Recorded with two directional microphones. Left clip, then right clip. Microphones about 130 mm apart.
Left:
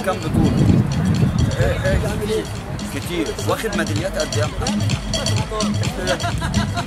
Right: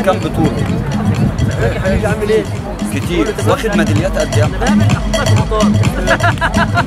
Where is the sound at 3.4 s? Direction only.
15° right (ahead or behind).